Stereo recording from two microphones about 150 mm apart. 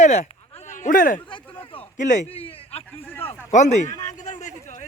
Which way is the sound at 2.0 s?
55° left (ahead or behind).